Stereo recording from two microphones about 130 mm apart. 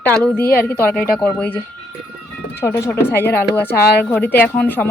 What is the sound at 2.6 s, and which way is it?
Speech, 20° left (ahead or behind).